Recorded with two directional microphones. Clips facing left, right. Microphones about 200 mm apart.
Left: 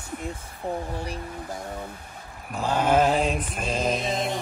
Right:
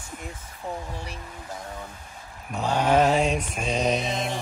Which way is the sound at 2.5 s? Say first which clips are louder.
Even; centre (ahead or behind).